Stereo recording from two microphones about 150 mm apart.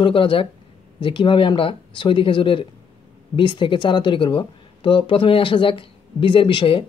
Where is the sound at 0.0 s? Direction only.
35° left (ahead or behind).